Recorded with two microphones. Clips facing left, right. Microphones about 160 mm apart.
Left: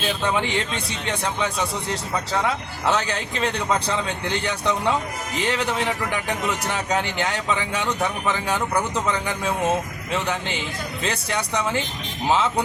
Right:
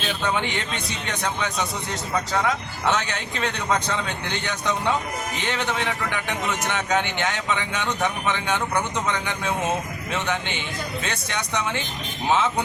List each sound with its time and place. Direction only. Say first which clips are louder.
2.9 s a man's voice: left 4 dB; 35° left (ahead or behind)
10.1 s a man's voice: left 1 dB; 35° left (ahead or behind)